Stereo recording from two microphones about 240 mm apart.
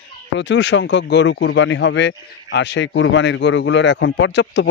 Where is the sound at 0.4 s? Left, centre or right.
Left.